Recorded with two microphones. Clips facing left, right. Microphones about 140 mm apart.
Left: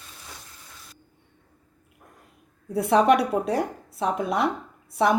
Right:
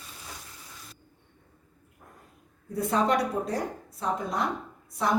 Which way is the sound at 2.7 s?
70° left (ahead or behind).